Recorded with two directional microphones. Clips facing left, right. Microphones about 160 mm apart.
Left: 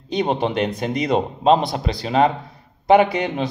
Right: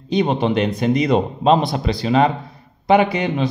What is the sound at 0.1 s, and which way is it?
A man's voice, 45° left (ahead or behind).